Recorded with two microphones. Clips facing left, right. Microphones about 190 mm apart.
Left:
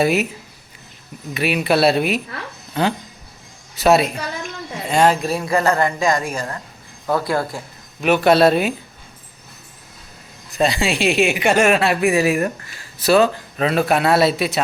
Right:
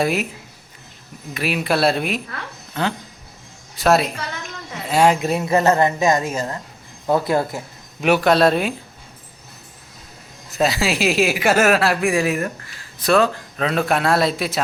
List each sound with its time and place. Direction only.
0.0 s speech: centre (ahead or behind)
1.3 s speech: centre (ahead or behind)
2.8 s speech: 15° left (ahead or behind)
3.8 s speech: centre (ahead or behind)
5.2 s a woman's voice: 20° right (ahead or behind)
8.2 s speech: 5° left (ahead or behind)
10.5 s speech: 5° right (ahead or behind)